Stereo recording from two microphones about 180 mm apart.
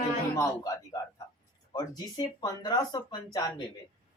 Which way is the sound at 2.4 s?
20° left (ahead or behind).